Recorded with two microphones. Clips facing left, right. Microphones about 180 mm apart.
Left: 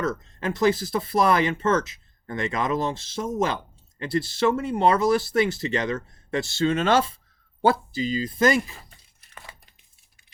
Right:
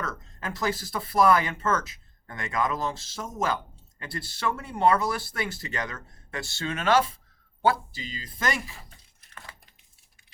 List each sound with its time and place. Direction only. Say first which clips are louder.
0.0 s speech: left 8 dB; 25° left (ahead or behind)